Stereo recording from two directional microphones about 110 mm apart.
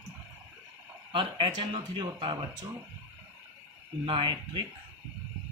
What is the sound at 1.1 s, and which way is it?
Speech, 45° right (ahead or behind).